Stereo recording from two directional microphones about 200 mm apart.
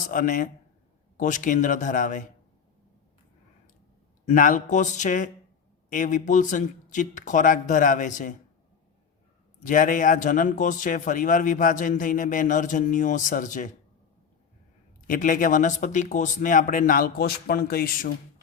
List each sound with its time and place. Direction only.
0.1 s a man's voice: 40° left (ahead or behind)
4.3 s a man's voice: 40° left (ahead or behind)
9.6 s a man's voice: 40° left (ahead or behind)
15.0 s speech: 45° left (ahead or behind)